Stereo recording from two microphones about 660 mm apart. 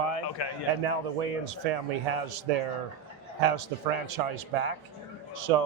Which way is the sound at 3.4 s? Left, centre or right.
Right.